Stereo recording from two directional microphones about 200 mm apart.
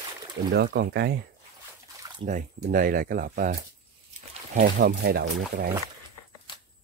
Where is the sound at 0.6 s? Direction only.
55° right (ahead or behind).